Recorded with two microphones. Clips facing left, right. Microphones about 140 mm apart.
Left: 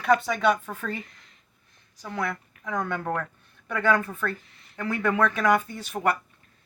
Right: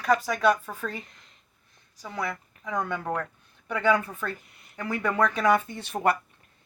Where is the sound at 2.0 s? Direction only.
10° right (ahead or behind).